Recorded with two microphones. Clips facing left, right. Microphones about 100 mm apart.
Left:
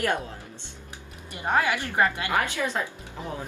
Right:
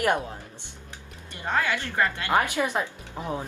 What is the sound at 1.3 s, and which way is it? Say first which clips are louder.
Speech: left 2 dB; 15° left (ahead or behind).